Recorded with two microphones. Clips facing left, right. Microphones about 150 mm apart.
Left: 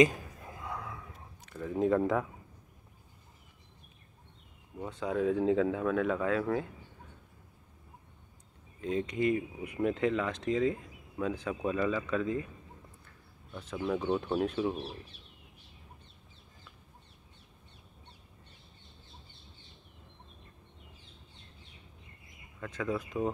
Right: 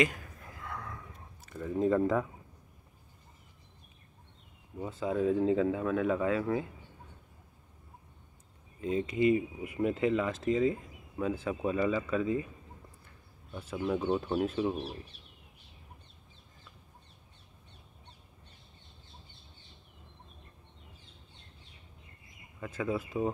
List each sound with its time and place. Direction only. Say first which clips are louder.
0.0 s a sound: left 5 dB; 20° left (ahead or behind)
1.5 s speech: even; centre (ahead or behind)
4.7 s speech: right 1 dB; 5° right (ahead or behind)
8.8 s speech: right 2 dB; 5° right (ahead or behind)
13.5 s speech: right 1 dB; 10° right (ahead or behind)
22.6 s speech: right 1 dB; 10° right (ahead or behind)